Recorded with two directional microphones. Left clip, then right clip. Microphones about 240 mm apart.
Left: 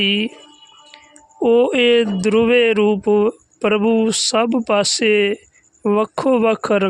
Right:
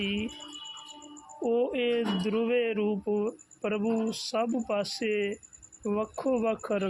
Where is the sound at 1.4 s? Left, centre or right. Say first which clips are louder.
Left 14 dB; left.